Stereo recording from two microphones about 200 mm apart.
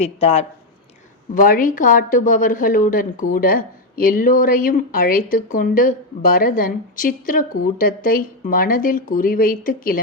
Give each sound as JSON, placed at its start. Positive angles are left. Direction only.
{"t": 0.0, "sound": "speech", "side_deg": 30}
{"t": 1.4, "sound": "speech", "side_deg": 45}